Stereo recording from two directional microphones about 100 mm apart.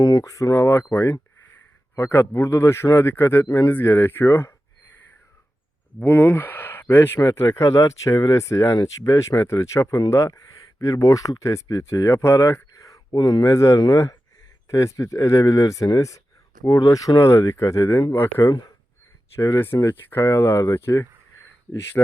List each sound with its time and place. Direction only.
0.0 s speech: 40° left (ahead or behind); by 3.4 s 20° left (ahead or behind)
3.4 s speech: 35° left (ahead or behind)
3.7 s speech: 20° left (ahead or behind)
6.0 s speech: 20° left (ahead or behind)
13.1 s speech: 45° left (ahead or behind)
13.5 s speech: 30° left (ahead or behind)